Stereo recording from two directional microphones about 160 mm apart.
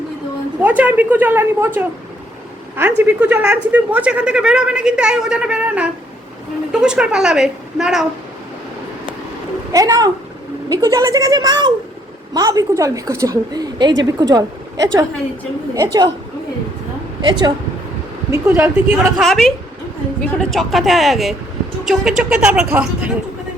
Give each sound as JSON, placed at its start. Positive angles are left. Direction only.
{"t": 0.6, "sound": "a woman's voice", "side_deg": -10}
{"t": 3.0, "sound": "a man's voice", "side_deg": -10}
{"t": 9.7, "sound": "a woman's voice", "side_deg": -20}
{"t": 17.2, "sound": "a woman's voice", "side_deg": -25}
{"t": 18.3, "sound": "a woman's voice", "side_deg": -15}
{"t": 19.1, "sound": "a man's voice", "side_deg": 0}